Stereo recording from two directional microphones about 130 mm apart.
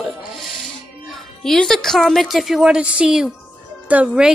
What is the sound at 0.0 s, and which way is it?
Music, centre (ahead or behind).